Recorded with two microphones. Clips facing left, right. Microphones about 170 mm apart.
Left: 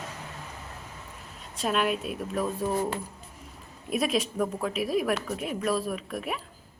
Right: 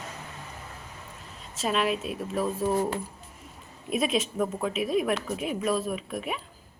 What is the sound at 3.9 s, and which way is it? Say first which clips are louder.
A woman's voice: even; centre (ahead or behind).